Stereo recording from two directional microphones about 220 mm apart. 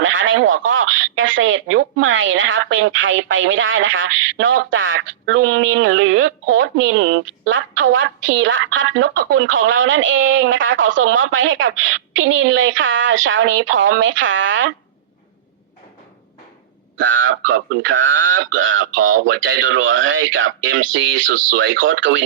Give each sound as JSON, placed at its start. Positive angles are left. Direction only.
{"t": 0.0, "sound": "telephone", "side_deg": -60}
{"t": 17.0, "sound": "speech", "side_deg": -60}